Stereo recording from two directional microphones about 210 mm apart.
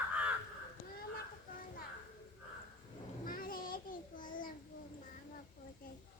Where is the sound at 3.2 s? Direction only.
40° left (ahead or behind).